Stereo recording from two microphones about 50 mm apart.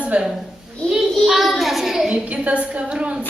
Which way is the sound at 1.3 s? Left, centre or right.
Centre.